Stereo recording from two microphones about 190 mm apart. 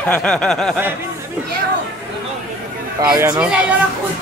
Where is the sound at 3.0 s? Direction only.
15° right (ahead or behind).